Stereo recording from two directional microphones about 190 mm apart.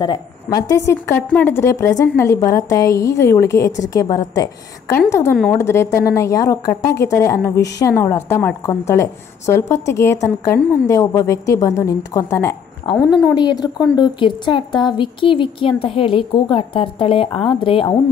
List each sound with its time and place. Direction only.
0.0 s a woman's voice: 25° left (ahead or behind)